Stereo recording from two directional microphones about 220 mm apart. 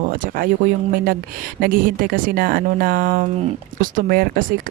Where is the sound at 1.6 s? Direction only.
40° right (ahead or behind).